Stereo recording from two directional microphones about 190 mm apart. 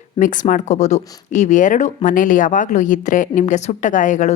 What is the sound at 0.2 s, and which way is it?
Speech, 45° left (ahead or behind).